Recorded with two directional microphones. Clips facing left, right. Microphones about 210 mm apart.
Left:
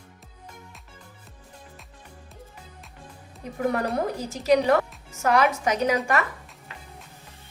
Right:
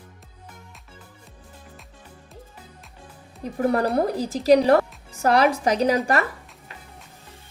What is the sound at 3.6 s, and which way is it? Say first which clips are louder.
A woman's voice: right 4 dB; 35° right (ahead or behind).